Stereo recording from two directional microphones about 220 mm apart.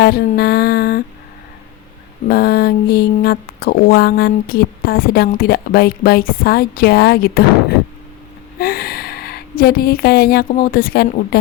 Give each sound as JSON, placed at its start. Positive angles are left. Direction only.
{"t": 0.3, "sound": "mantra", "side_deg": 45}
{"t": 2.2, "sound": "mantra", "side_deg": 45}
{"t": 8.5, "sound": "a woman's voice", "side_deg": 45}